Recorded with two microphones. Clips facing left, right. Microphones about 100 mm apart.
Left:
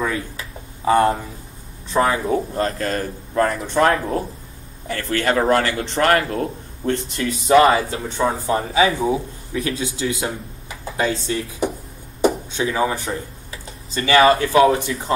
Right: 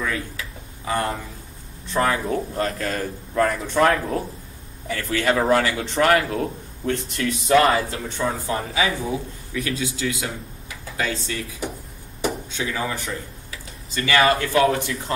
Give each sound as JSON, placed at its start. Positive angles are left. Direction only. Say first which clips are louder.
{"t": 0.0, "sound": "a sound", "louder": "left 3 dB", "side_deg": 25}
{"t": 2.0, "sound": "speech", "louder": "left 3 dB", "side_deg": 15}
{"t": 2.5, "sound": "a man's voice", "louder": "left 3 dB", "side_deg": 0}
{"t": 7.6, "sound": "speech", "louder": "left 4 dB", "side_deg": 25}